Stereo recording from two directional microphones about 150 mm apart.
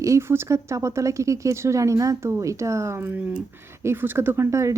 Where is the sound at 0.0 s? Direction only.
20° right (ahead or behind).